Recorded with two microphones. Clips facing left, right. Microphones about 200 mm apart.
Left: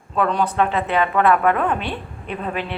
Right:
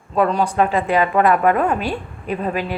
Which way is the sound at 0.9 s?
35° right (ahead or behind).